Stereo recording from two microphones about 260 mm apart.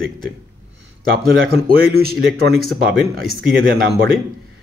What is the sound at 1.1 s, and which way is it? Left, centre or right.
Speech, right.